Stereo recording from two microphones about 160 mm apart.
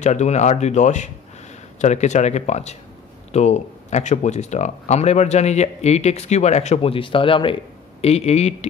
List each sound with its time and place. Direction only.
0.0 s speech: 45° left (ahead or behind)